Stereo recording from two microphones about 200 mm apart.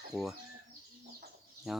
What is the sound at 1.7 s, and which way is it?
Speech, centre (ahead or behind).